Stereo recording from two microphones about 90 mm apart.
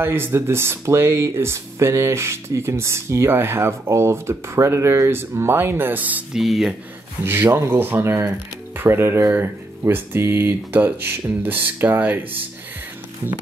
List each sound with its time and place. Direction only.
0.0 s speech: 25° right (ahead or behind)
6.3 s speech: 5° right (ahead or behind)
7.2 s speech: 25° right (ahead or behind)